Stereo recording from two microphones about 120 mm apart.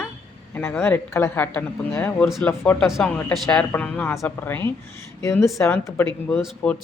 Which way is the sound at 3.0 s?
15° left (ahead or behind).